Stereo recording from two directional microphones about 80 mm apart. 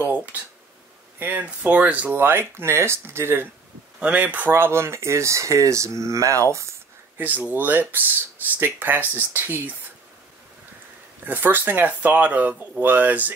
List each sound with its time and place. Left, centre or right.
0.0 s speech: centre
2.1 s speech: right
4.0 s speech: centre; by 6.7 s right
7.2 s speech: right
11.2 s speech: right